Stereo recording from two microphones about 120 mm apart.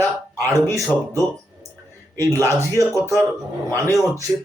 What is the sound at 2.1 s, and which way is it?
Speech, 20° left (ahead or behind).